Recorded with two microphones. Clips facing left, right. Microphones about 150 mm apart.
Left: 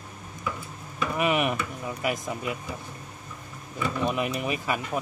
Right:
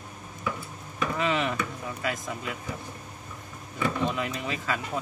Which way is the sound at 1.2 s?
15° left (ahead or behind).